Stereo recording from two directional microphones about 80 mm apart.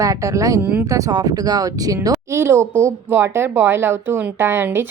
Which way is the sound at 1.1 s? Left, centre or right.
Right.